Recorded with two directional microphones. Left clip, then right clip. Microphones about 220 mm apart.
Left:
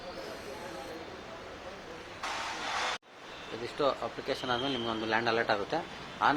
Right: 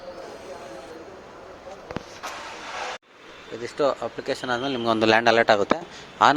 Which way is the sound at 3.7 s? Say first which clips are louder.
Right 7 dB; 25° right (ahead or behind).